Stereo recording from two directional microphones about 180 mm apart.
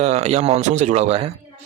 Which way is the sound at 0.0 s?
35° right (ahead or behind).